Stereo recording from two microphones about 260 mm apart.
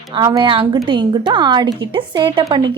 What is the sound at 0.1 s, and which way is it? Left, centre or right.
Speech, centre.